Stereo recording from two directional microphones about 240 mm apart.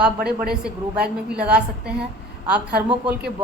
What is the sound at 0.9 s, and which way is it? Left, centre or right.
Speech, right.